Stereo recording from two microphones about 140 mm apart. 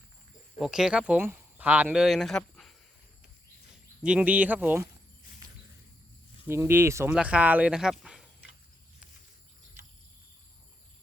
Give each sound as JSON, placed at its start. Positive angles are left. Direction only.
{"t": 0.6, "sound": "speech", "side_deg": -5}
{"t": 6.5, "sound": "speech", "side_deg": -15}